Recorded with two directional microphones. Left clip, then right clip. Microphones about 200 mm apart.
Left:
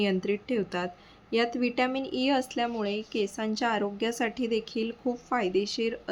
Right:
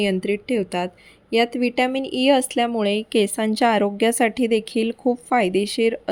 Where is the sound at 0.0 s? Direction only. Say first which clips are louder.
Right 6 dB; 25° right (ahead or behind).